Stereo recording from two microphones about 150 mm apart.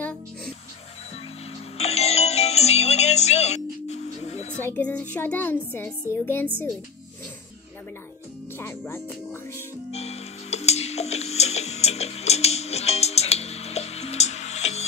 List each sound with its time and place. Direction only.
1.8 s music: 45° left (ahead or behind)
4.7 s a woman's voice: 10° left (ahead or behind)
8.5 s music: 15° left (ahead or behind)
9.8 s music: 45° left (ahead or behind)